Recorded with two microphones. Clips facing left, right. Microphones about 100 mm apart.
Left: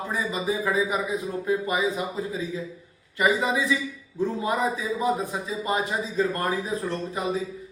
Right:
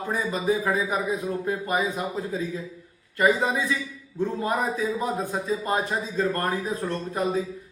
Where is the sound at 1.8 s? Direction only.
Centre (ahead or behind).